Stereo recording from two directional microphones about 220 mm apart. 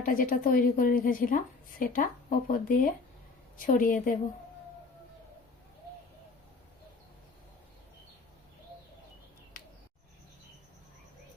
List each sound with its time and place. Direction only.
0.0 s a woman's voice: 40° left (ahead or behind)